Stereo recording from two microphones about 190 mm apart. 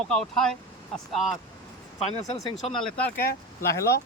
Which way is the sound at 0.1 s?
Centre (ahead or behind).